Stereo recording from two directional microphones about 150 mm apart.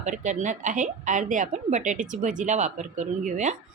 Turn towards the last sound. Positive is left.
turn(degrees=-55)  # may be behind; listen again after turning